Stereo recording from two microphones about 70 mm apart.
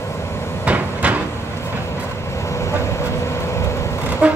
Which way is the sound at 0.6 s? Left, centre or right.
Right.